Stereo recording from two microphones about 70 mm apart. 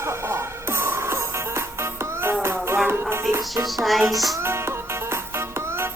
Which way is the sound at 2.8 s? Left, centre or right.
Right.